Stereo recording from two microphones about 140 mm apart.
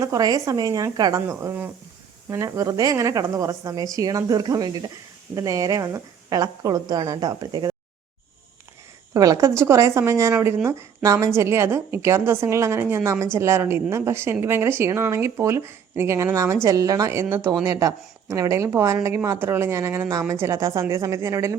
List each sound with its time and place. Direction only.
0.0 s a woman's voice: 25° right (ahead or behind)
9.1 s a woman's voice: 25° right (ahead or behind)